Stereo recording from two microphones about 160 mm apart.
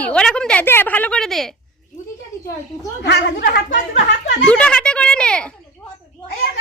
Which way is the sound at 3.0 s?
90° left.